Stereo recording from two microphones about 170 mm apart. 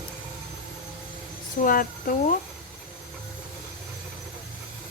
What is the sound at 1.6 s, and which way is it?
Speech, 55° left (ahead or behind).